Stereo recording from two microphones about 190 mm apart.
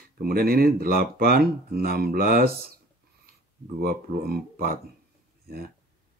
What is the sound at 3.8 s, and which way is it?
Speech, 50° right (ahead or behind).